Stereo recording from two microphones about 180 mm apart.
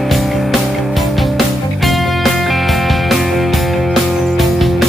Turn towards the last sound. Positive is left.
turn(degrees=0)  # may be behind; listen again after turning